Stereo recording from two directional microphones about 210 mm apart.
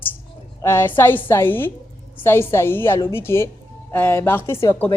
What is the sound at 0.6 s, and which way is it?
A woman's voice, 10° left (ahead or behind).